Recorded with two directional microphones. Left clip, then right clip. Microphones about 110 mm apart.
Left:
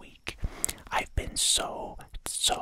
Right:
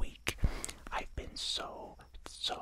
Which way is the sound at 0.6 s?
25° left (ahead or behind).